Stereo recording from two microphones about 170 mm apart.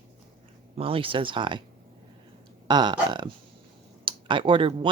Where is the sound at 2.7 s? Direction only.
25° right (ahead or behind).